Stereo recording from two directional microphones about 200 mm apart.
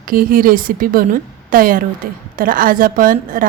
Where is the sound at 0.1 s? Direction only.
45° right (ahead or behind).